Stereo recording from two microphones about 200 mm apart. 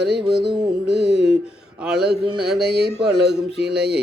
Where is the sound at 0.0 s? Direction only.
55° right (ahead or behind).